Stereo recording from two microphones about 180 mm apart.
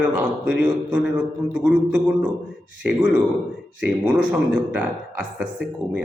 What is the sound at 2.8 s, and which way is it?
Speech, 10° right (ahead or behind).